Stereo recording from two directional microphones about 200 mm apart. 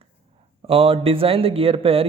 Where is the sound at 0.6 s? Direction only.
30° right (ahead or behind).